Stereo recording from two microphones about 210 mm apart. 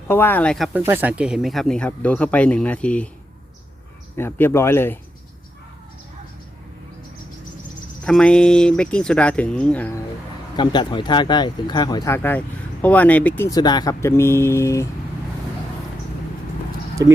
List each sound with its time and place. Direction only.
0.1 s speech: 10° left (ahead or behind)
0.7 s speech: 10° right (ahead or behind); by 3.1 s 5° left (ahead or behind)
4.2 s speech: 10° left (ahead or behind)
8.0 s speech: 5° left (ahead or behind)
10.6 s speech: 20° left (ahead or behind)
17.0 s speech: 15° right (ahead or behind)